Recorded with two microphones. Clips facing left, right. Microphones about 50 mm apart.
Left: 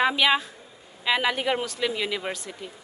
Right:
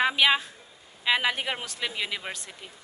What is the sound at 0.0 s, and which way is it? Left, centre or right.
A woman's voice, centre.